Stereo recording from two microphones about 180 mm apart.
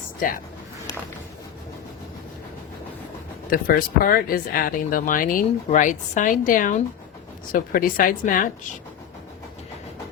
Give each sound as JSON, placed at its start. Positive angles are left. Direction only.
{"t": 0.2, "sound": "speech", "side_deg": 50}
{"t": 3.5, "sound": "speech", "side_deg": 50}